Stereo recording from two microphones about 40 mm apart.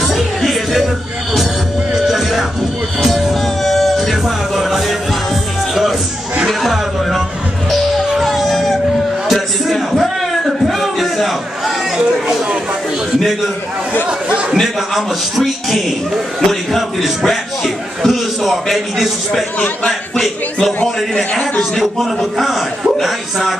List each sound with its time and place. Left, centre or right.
0.0 s music: centre
2.0 s music: centre
6.4 s a sound: centre
12.0 s a sound: centre
14.5 s a man's voice: centre
20.8 s a man's voice: left
21.7 s a man's voice: centre